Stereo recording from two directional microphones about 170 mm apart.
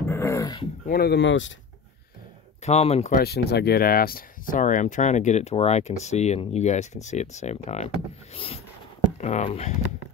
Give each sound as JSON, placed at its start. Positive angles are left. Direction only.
{"t": 0.1, "sound": "dog", "side_deg": 15}
{"t": 0.8, "sound": "speech", "side_deg": 65}
{"t": 2.6, "sound": "speech", "side_deg": 40}
{"t": 3.2, "sound": "speech", "side_deg": 70}
{"t": 9.2, "sound": "speech", "side_deg": 40}